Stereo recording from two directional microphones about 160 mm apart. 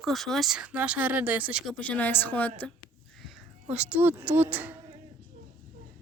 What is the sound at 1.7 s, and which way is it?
Speech, 10° left (ahead or behind).